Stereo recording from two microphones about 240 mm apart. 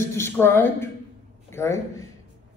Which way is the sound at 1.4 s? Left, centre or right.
Centre.